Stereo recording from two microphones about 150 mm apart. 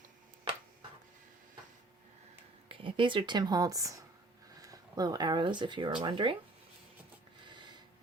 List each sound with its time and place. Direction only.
2.6 s speech: 35° right (ahead or behind)